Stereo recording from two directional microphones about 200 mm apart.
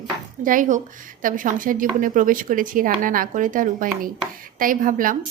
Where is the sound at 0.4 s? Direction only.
40° right (ahead or behind).